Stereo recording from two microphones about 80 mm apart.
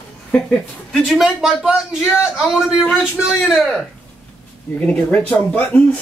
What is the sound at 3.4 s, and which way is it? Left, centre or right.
Speech, centre.